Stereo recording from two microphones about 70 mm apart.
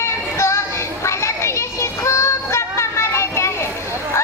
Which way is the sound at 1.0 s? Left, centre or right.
Left.